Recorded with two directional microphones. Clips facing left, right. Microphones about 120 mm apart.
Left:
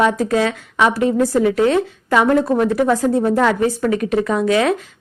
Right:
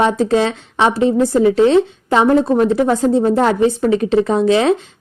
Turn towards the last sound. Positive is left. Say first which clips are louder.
# right 3 dB
turn(degrees=-25)  # may be behind; listen again after turning